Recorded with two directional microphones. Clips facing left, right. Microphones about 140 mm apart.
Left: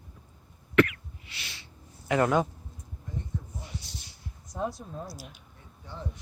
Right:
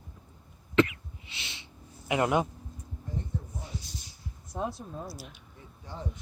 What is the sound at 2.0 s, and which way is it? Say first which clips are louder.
Speech: left 2 dB; 15° right (ahead or behind).